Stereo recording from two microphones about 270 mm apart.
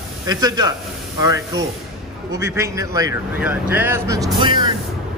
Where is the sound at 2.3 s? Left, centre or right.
Centre.